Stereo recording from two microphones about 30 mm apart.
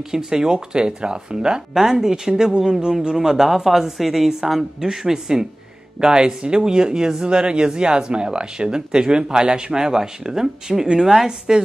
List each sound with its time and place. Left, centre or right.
0.1 s speech: centre
3.2 s a woman's voice: centre
5.9 s a woman's voice: right